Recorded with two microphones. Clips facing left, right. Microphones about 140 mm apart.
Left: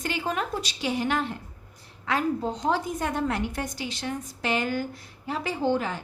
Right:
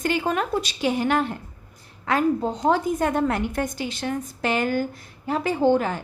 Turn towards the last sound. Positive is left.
turn(degrees=-50)  # may be behind; listen again after turning